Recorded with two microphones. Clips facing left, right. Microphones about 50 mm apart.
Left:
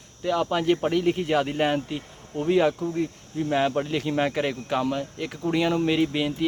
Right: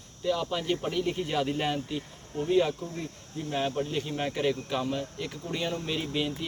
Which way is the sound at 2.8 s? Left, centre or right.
Left.